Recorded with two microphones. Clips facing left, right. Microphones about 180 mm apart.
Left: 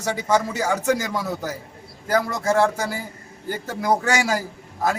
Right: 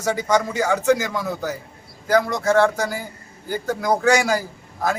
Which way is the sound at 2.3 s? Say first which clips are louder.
Right 2 dB; 5° left (ahead or behind).